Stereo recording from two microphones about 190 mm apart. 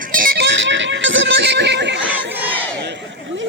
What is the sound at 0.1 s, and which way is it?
Music, 50° right (ahead or behind).